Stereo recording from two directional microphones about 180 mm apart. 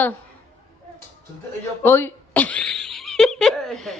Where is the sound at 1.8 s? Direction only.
10° left (ahead or behind).